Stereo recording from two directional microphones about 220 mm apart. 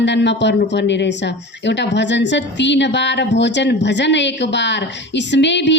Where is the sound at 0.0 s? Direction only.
55° left (ahead or behind).